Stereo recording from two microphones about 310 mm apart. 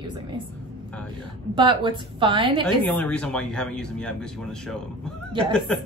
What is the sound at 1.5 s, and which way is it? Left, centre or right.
A woman's voice, centre.